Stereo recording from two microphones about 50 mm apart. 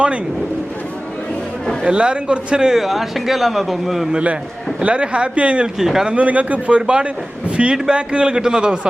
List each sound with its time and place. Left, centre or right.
1.8 s a man's voice: right
2.7 s a man's voice: centre
4.1 s a man's voice: right
5.8 s speech: centre
6.1 s a man's voice: right